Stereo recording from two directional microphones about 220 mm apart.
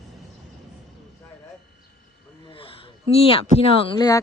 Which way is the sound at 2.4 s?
25° left (ahead or behind).